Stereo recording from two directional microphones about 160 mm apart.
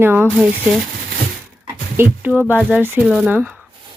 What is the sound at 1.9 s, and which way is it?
Speech, 10° right (ahead or behind).